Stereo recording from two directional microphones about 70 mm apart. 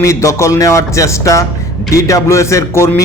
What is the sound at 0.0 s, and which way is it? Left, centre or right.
A man's voice, left.